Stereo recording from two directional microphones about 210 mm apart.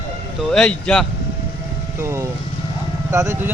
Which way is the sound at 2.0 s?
10° right (ahead or behind).